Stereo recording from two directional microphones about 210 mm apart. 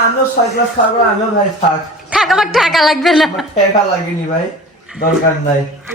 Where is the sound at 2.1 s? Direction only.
Centre (ahead or behind).